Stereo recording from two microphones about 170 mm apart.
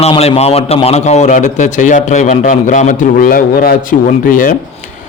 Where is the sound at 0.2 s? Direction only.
35° left (ahead or behind); by 4.5 s 55° left (ahead or behind).